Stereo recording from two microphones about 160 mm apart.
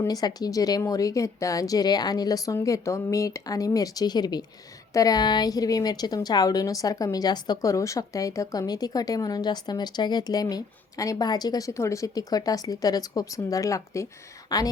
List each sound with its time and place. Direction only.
0.0 s a woman's voice: 25° left (ahead or behind)